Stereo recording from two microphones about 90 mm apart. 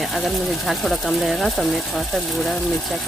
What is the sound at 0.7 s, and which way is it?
Speech, centre (ahead or behind).